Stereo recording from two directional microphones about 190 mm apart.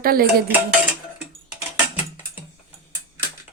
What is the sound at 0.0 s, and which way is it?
Dishes, 50° right (ahead or behind).